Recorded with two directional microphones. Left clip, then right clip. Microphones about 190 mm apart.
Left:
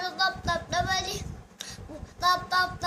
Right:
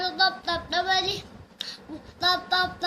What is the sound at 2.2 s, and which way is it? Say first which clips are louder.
Speech: right 1 dB; 20° left (ahead or behind).